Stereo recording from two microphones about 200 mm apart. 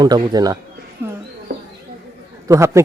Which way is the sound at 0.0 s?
20° right (ahead or behind).